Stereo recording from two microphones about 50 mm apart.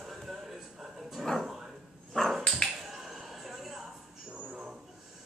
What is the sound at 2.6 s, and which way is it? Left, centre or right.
Finger snapping, centre.